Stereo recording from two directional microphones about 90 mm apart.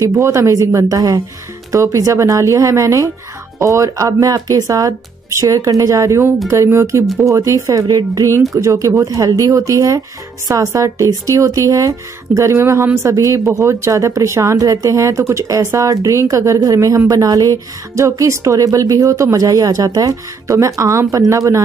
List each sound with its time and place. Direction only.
0.0 s speech: 35° right (ahead or behind)